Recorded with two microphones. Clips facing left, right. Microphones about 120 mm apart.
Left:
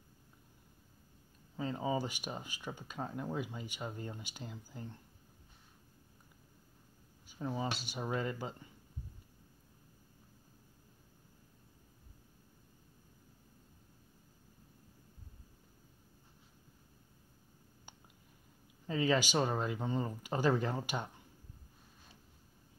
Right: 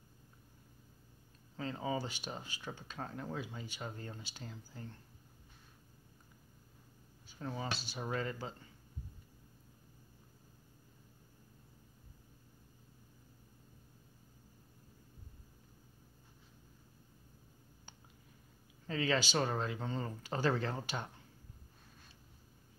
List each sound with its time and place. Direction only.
1.6 s speech: 20° left (ahead or behind)
7.2 s speech: 15° left (ahead or behind)
18.9 s speech: 15° left (ahead or behind)